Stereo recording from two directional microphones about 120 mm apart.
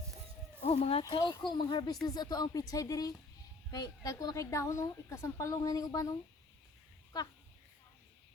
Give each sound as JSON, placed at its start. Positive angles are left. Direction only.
{"t": 0.6, "sound": "speech", "side_deg": 65}
{"t": 1.1, "sound": "a woman's voice", "side_deg": 40}